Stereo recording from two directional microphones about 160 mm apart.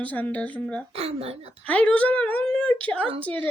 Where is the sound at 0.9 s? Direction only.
40° right (ahead or behind).